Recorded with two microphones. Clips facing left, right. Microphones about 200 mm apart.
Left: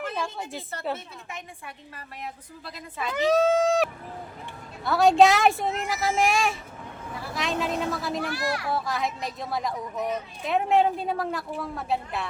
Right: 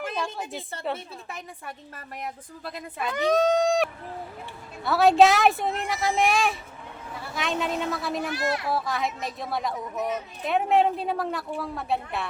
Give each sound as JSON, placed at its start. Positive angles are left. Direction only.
{"t": 0.2, "sound": "a woman's voice", "side_deg": 0}
{"t": 0.9, "sound": "a woman's voice", "side_deg": -40}
{"t": 3.1, "sound": "a woman's voice", "side_deg": 5}
{"t": 8.3, "sound": "a child's voice", "side_deg": -20}
{"t": 8.7, "sound": "a woman's voice", "side_deg": 0}